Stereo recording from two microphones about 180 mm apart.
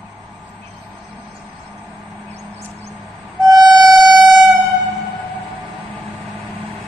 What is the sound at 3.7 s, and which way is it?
Siren, centre (ahead or behind).